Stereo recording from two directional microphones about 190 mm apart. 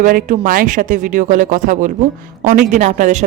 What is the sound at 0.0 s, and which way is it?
Speech, 45° right (ahead or behind).